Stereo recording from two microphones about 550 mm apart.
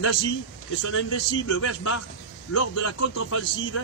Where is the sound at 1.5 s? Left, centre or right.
Left.